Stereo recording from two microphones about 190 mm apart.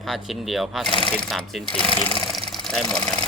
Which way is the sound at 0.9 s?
25° left (ahead or behind).